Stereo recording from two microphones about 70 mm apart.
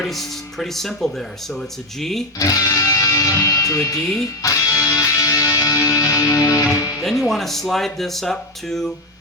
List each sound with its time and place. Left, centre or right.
0.0 s speech: centre
2.4 s music: left
7.0 s speech: centre